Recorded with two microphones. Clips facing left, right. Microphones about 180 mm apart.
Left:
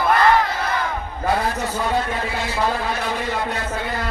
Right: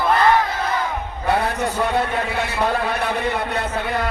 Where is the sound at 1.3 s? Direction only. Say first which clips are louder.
Right 1 dB; 65° right (ahead or behind).